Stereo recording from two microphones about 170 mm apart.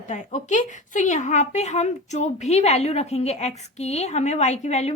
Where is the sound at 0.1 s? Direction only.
45° left (ahead or behind).